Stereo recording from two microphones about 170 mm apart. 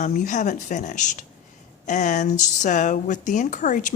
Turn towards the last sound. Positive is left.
turn(degrees=45)  # may be behind; listen again after turning